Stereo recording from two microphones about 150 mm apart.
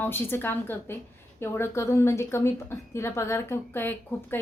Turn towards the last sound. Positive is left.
turn(degrees=15)  # may be behind; listen again after turning